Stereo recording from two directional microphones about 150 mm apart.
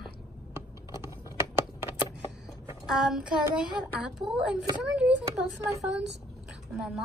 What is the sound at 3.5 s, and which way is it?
Speech, 5° right (ahead or behind).